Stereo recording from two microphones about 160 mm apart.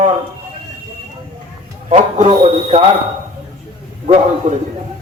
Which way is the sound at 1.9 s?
45° right (ahead or behind).